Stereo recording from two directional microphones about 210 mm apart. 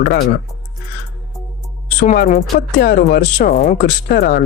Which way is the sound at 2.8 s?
45° left (ahead or behind).